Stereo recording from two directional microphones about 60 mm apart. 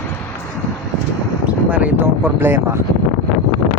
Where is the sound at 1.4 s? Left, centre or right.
Right.